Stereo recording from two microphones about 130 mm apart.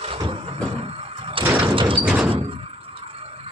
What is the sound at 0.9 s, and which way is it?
Door, 50° right (ahead or behind).